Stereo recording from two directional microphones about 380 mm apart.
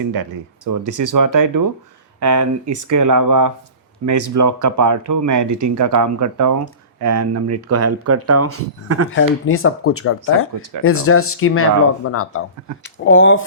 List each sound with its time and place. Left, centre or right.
0.1 s speech: right
9.0 s speech: left